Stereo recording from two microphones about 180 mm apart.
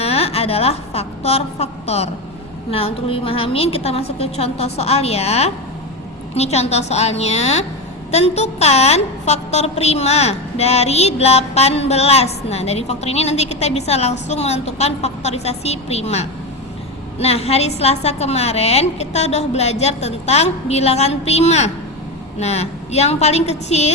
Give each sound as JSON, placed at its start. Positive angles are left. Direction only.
{"t": 0.0, "sound": "a woman's voice", "side_deg": 35}